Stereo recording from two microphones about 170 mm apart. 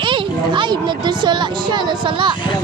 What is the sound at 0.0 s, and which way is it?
Speech, 30° right (ahead or behind).